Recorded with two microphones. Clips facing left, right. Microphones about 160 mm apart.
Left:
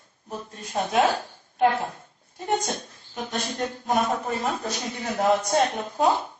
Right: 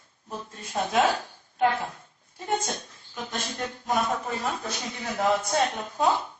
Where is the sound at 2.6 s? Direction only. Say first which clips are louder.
Left 3 dB; 30° left (ahead or behind).